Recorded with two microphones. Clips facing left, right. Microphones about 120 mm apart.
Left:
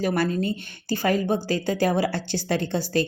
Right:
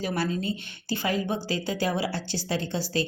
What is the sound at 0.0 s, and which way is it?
A woman's voice, 50° left (ahead or behind).